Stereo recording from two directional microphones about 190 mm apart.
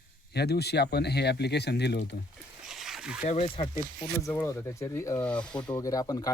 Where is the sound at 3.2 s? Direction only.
35° left (ahead or behind).